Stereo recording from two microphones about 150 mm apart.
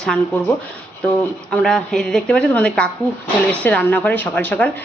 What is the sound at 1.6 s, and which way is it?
Speech, 5° left (ahead or behind).